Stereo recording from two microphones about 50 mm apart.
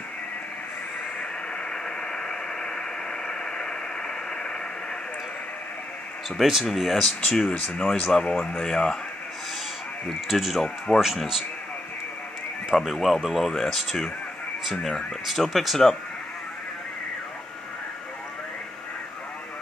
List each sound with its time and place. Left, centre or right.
1.6 s white noise: centre
6.4 s speech: centre
6.7 s speech: centre
7.2 s speech: centre
10.2 s speech: centre
10.9 s speech: centre
12.7 s speech: centre